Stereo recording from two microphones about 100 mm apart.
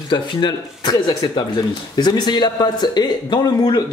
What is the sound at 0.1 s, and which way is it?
Speech, 50° left (ahead or behind).